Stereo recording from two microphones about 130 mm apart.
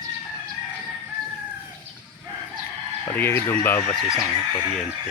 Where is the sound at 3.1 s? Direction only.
15° left (ahead or behind).